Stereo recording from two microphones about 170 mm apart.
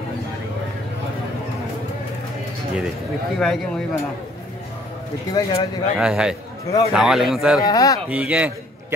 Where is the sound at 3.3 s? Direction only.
Centre (ahead or behind).